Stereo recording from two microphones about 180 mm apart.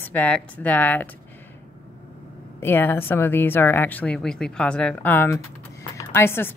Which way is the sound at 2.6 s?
10° left (ahead or behind).